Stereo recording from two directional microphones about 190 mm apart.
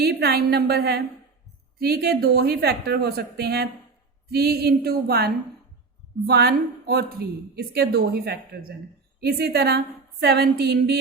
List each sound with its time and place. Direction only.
0.0 s a woman's voice: 55° right (ahead or behind)